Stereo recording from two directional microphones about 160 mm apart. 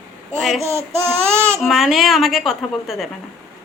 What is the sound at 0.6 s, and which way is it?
Child singing, 15° right (ahead or behind).